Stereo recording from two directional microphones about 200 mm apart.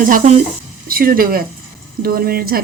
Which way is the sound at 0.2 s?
35° right (ahead or behind).